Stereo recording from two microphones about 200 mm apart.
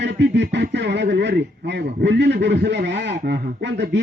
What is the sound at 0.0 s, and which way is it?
A man's voice, 60° right (ahead or behind).